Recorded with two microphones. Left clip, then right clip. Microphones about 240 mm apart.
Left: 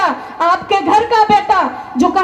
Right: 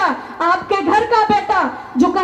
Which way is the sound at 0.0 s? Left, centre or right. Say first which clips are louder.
Left 3 dB; left.